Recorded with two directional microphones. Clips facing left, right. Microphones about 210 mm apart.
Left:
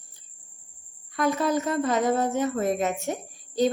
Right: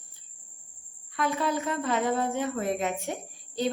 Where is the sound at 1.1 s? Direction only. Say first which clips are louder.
Left 4 dB; 40° left (ahead or behind).